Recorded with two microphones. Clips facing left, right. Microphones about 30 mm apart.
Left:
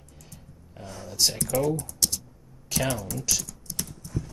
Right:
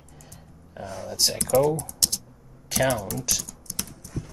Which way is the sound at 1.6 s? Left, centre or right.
Right.